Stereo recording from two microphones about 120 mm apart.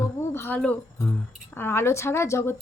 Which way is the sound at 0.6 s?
15° left (ahead or behind).